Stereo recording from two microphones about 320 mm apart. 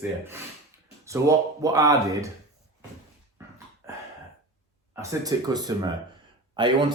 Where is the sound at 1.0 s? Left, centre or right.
Centre.